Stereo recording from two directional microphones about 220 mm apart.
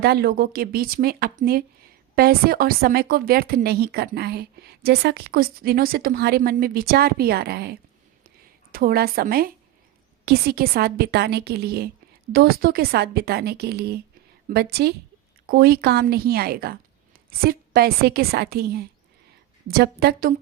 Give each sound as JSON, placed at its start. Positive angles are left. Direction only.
{"t": 0.0, "sound": "a woman's voice", "side_deg": -45}